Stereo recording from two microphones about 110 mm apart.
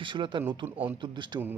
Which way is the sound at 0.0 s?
45° right (ahead or behind).